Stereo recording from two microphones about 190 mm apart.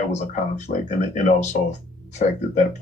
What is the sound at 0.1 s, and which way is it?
Speech, 35° left (ahead or behind).